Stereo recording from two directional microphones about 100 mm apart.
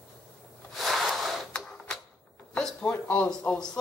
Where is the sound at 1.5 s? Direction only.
10° left (ahead or behind).